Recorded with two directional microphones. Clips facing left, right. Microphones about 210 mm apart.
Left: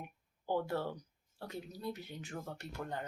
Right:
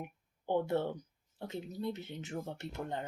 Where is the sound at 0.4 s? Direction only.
20° right (ahead or behind).